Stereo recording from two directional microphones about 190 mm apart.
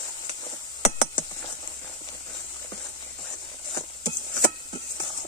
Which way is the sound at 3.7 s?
20° left (ahead or behind).